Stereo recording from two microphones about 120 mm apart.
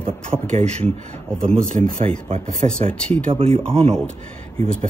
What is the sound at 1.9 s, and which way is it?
Speech, 90° right.